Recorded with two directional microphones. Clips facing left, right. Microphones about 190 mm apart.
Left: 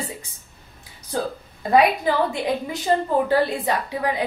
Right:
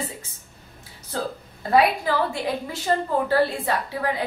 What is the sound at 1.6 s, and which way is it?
A woman's voice, 20° left (ahead or behind).